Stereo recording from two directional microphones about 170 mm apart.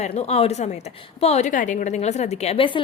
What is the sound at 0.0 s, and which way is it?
A woman's voice, 40° left (ahead or behind).